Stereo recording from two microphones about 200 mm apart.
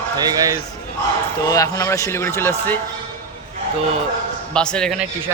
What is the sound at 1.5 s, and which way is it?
A man's voice, 20° left (ahead or behind).